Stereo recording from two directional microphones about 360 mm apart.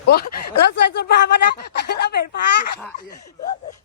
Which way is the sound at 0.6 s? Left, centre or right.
Left.